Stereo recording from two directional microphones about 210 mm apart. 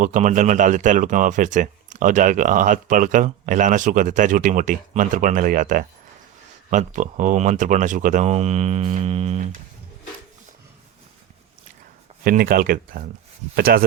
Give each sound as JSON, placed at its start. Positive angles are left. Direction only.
{"t": 0.0, "sound": "speech", "side_deg": -35}
{"t": 12.2, "sound": "speech", "side_deg": -45}